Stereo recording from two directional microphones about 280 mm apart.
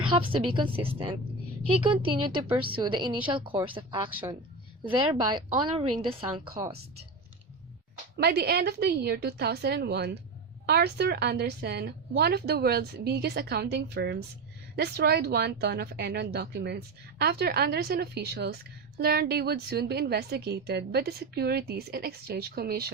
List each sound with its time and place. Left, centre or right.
0.0 s a woman's voice: centre
2.3 s a woman's voice: centre
4.9 s a woman's voice: centre
8.1 s speech: right